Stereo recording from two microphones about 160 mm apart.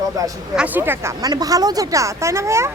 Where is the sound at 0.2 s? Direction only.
20° right (ahead or behind).